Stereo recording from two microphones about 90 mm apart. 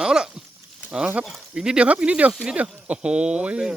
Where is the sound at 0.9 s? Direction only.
15° right (ahead or behind).